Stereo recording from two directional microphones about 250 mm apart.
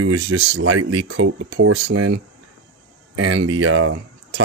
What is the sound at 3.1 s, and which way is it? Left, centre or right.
Speech, right.